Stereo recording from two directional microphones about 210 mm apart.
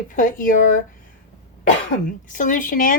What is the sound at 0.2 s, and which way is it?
Speech, 40° left (ahead or behind).